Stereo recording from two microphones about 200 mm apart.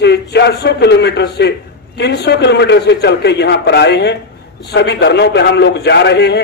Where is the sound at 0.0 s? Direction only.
55° left (ahead or behind).